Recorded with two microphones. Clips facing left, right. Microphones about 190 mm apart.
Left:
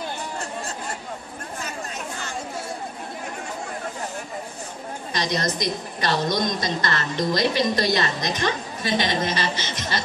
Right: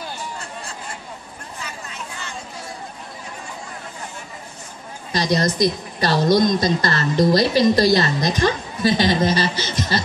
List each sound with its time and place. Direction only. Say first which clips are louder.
5.1 s a woman's voice: right 6 dB; 35° right (ahead or behind)